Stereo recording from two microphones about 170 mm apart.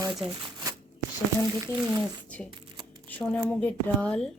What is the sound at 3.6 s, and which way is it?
Speech, 10° left (ahead or behind).